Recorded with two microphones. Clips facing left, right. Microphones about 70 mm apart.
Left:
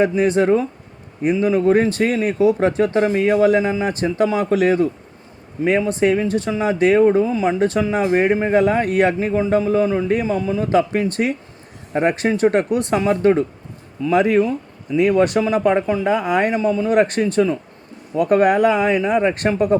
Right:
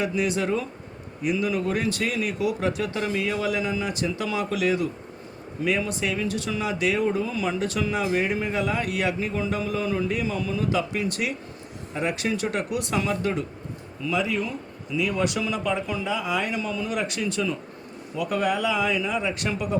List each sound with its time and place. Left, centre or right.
0.0 s speech: left
14.1 s speech: left
16.6 s speech: left